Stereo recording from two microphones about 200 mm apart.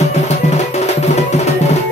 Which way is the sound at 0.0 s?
35° left (ahead or behind).